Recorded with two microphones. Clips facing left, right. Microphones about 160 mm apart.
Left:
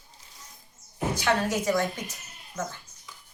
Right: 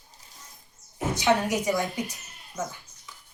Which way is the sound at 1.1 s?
15° right (ahead or behind).